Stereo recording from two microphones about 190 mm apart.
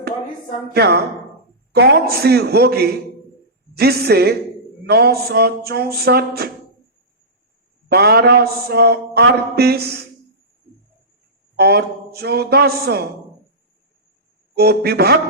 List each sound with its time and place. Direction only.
0.7 s a man's voice: 60° right (ahead or behind)
7.9 s a man's voice: 60° right (ahead or behind)
11.5 s a man's voice: 55° right (ahead or behind)
14.5 s a man's voice: 55° right (ahead or behind)